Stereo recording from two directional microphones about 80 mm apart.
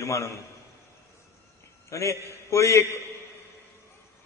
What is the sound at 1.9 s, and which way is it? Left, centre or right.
A man's voice, left.